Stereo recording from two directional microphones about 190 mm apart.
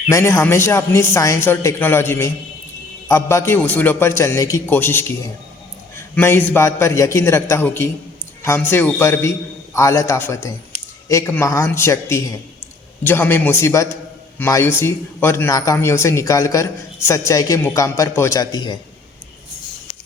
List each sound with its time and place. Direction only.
0.1 s a man's voice: 15° left (ahead or behind)
6.1 s a man's voice: 10° left (ahead or behind)